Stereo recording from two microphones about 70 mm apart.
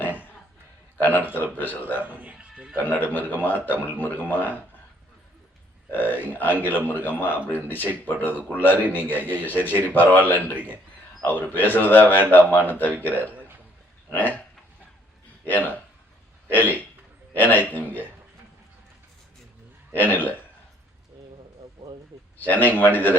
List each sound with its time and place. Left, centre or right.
0.0 s a sound: left
0.9 s a man's voice: left
2.0 s speech: right
2.5 s music: centre
2.7 s a man's voice: left
5.9 s a man's voice: left
15.4 s a man's voice: left
19.9 s a man's voice: left
22.4 s a man's voice: left